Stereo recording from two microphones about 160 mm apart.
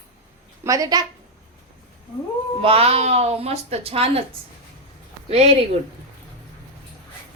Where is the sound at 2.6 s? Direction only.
35° right (ahead or behind).